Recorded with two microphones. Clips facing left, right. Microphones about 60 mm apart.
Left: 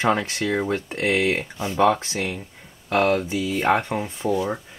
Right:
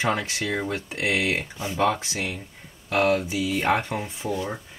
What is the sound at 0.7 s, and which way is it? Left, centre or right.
Speech, centre.